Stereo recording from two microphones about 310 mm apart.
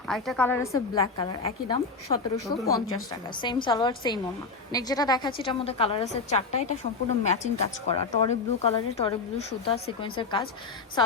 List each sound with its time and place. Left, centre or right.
0.1 s a woman's voice: centre